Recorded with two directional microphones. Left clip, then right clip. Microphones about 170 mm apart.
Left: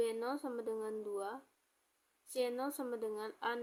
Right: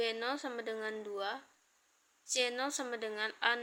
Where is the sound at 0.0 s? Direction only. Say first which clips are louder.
Right 2 dB; 40° left (ahead or behind).